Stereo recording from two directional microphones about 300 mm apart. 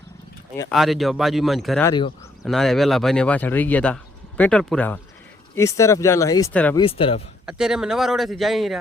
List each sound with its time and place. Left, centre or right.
0.5 s speech: centre
1.9 s speech: centre
2.4 s speech: centre
6.8 s speech: centre
7.4 s speech: centre